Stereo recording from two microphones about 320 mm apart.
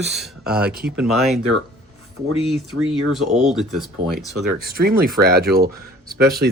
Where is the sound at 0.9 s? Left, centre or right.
Centre.